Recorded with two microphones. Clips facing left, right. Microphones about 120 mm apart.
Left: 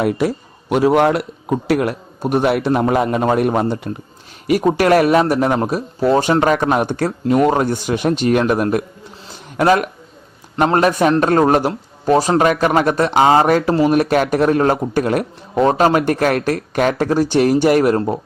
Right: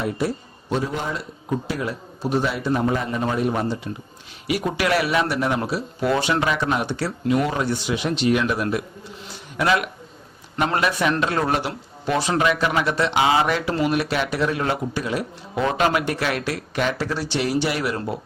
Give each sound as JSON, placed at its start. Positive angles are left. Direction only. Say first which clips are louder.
{"t": 0.0, "sound": "speech", "louder": "left 7 dB", "side_deg": 90}
{"t": 4.4, "sound": "speech", "louder": "left 9 dB", "side_deg": 45}
{"t": 15.5, "sound": "speech", "louder": "left 7 dB", "side_deg": 40}